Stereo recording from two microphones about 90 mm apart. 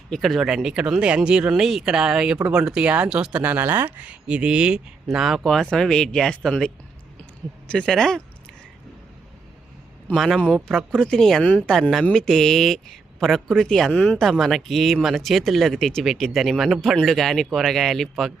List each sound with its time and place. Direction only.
0.1 s speech: centre (ahead or behind)
7.7 s speech: 10° left (ahead or behind)
10.2 s speech: centre (ahead or behind)
13.9 s speech: 15° left (ahead or behind)
14.2 s speech: centre (ahead or behind)